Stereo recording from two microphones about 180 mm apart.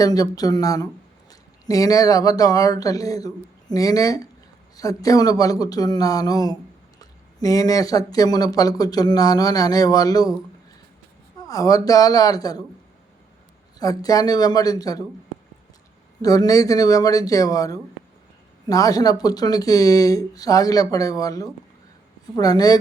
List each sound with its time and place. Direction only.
0.0 s speech: 20° left (ahead or behind)
11.4 s speech: 20° left (ahead or behind)
13.7 s speech: 20° left (ahead or behind)
16.2 s speech: 20° left (ahead or behind)